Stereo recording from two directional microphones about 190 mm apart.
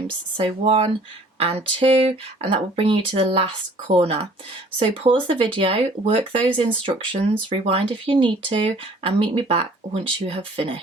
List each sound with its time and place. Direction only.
0.3 s speech: 30° right (ahead or behind)